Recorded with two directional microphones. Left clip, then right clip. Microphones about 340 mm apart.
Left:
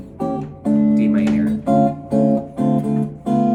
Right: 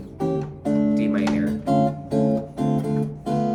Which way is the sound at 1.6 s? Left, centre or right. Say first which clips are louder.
Left 5 dB; centre.